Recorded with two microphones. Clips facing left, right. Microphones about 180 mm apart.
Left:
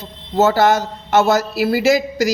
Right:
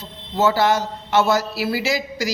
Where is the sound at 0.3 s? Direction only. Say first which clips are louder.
Left 4 dB; 45° left (ahead or behind).